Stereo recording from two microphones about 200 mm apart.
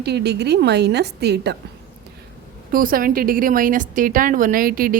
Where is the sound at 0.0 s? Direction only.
55° right (ahead or behind).